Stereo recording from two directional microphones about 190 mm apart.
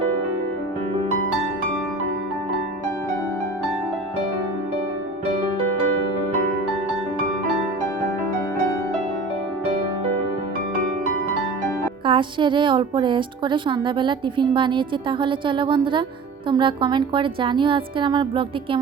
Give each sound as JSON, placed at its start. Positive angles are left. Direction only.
{"t": 12.0, "sound": "a woman's voice", "side_deg": -25}